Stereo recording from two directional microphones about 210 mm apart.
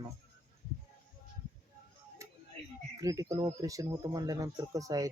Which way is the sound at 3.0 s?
15° right (ahead or behind).